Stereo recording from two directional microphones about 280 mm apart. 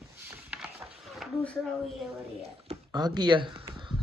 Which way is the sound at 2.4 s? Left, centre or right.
Centre.